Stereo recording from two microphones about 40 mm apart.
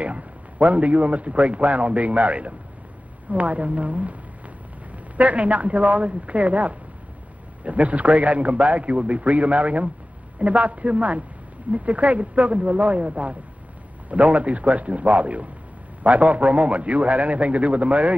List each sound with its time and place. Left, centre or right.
0.0 s a man's voice: right